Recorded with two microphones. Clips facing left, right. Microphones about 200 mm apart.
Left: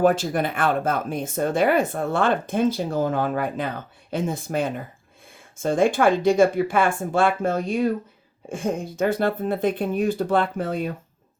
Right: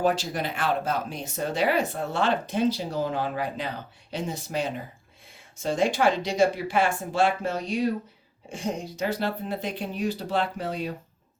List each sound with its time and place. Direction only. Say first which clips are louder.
0.0 s speech: left 6 dB; 50° left (ahead or behind)